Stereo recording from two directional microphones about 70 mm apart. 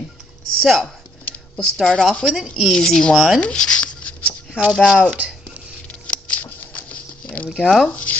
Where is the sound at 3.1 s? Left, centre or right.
Centre.